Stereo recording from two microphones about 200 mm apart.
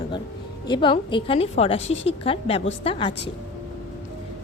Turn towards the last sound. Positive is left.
turn(degrees=25)  # may be behind; listen again after turning